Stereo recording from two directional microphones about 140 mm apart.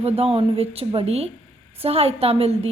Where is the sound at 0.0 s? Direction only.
45° right (ahead or behind).